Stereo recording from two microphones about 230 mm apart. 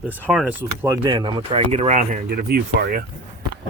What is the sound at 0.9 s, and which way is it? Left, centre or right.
Speech, centre.